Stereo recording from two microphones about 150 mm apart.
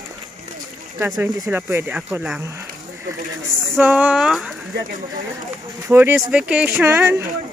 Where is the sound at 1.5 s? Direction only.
15° right (ahead or behind).